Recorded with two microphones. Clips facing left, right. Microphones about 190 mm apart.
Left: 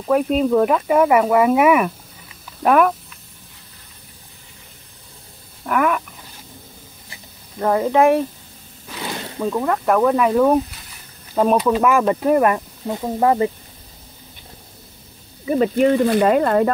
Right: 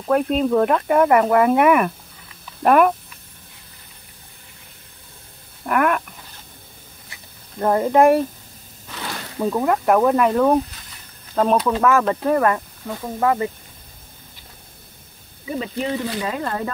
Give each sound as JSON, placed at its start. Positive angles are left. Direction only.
{"t": 0.0, "sound": "speech", "side_deg": 0}
{"t": 5.7, "sound": "a sound", "side_deg": 0}
{"t": 7.5, "sound": "speech", "side_deg": 0}
{"t": 8.8, "sound": "a sound", "side_deg": 15}
{"t": 9.4, "sound": "speech", "side_deg": -10}
{"t": 15.4, "sound": "speech", "side_deg": 50}